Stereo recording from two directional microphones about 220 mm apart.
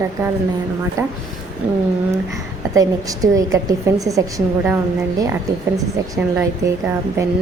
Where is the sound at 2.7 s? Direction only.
15° right (ahead or behind).